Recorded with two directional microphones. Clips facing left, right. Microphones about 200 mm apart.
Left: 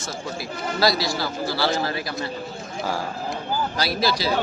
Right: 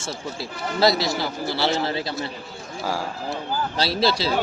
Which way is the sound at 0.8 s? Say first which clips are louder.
Right 2 dB; 25° right (ahead or behind).